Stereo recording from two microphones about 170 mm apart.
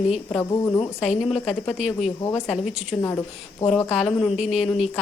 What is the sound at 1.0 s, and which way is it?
Speech, centre (ahead or behind).